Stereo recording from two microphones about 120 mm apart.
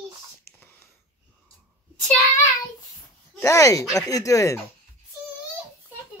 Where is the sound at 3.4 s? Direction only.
25° left (ahead or behind).